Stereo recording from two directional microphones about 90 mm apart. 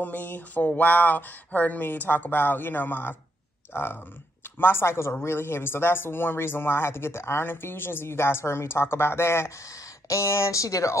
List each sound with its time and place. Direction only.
0.0 s speech: 20° left (ahead or behind); by 11.0 s 35° left (ahead or behind)